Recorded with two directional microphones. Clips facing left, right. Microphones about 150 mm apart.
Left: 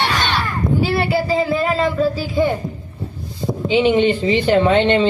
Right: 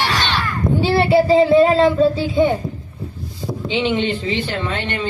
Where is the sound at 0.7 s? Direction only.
30° right (ahead or behind).